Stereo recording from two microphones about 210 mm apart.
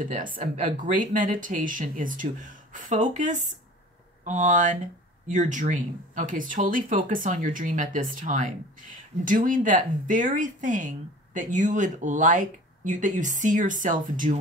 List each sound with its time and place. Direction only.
0.0 s speech: 40° right (ahead or behind)